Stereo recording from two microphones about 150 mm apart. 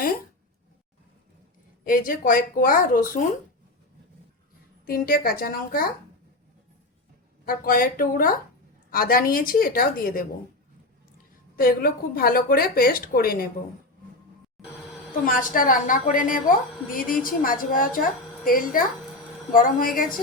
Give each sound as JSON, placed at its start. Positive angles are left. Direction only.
{"t": 1.8, "sound": "a woman's voice", "side_deg": 70}
{"t": 4.9, "sound": "a woman's voice", "side_deg": 75}
{"t": 7.4, "sound": "a woman's voice", "side_deg": 75}
{"t": 11.5, "sound": "a woman's voice", "side_deg": 75}
{"t": 15.3, "sound": "a woman's voice", "side_deg": 65}